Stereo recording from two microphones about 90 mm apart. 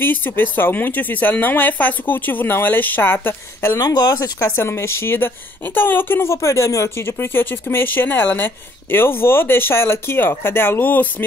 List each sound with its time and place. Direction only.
0.0 s speech: 20° left (ahead or behind)
3.7 s speech: 45° left (ahead or behind)
4.4 s speech: 25° left (ahead or behind)